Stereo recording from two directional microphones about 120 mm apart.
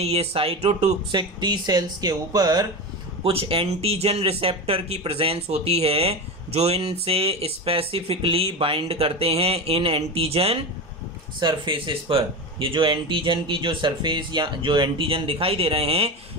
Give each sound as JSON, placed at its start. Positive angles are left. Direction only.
{"t": 0.0, "sound": "speech", "side_deg": -60}
{"t": 1.1, "sound": "speech", "side_deg": -35}
{"t": 3.3, "sound": "speech", "side_deg": -50}
{"t": 11.3, "sound": "speech", "side_deg": -40}